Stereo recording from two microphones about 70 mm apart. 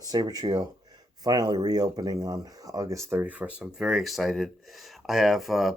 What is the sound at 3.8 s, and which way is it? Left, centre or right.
Speech, centre.